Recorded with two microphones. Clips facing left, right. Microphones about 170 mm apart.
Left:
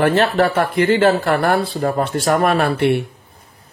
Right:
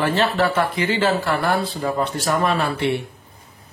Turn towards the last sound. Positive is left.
turn(degrees=55)  # may be behind; listen again after turning